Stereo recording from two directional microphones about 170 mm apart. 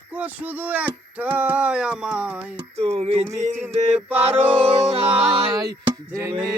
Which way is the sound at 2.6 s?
35° right (ahead or behind).